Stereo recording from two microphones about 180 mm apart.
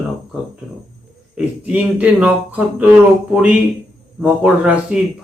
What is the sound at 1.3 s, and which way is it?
Speech, 5° right (ahead or behind).